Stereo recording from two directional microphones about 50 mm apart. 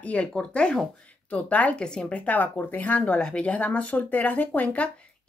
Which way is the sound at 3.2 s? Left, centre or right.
Centre.